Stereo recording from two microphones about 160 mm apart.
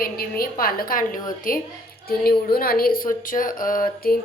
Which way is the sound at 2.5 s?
70° left (ahead or behind).